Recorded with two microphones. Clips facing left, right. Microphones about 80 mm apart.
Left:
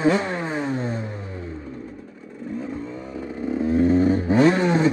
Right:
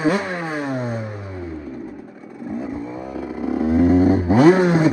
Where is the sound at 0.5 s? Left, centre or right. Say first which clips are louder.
Right 1 dB; right.